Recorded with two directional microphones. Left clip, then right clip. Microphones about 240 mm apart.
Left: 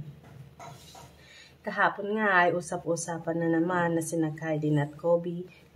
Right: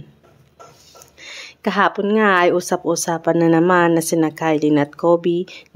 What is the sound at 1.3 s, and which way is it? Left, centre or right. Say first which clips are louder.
Speech: right 13 dB; right.